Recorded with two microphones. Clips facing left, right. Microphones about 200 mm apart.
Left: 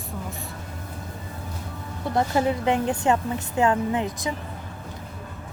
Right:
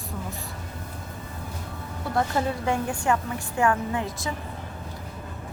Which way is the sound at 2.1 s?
20° left (ahead or behind).